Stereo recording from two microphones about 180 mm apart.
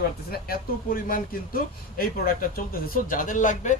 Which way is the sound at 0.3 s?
55° left (ahead or behind).